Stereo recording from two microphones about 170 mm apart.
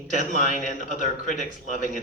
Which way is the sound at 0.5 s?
50° left (ahead or behind).